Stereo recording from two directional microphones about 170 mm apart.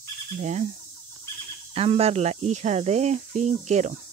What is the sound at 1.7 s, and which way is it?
Speech, 35° right (ahead or behind).